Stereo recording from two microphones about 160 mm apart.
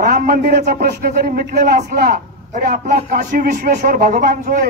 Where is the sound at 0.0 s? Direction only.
60° right (ahead or behind); by 1.8 s 80° right.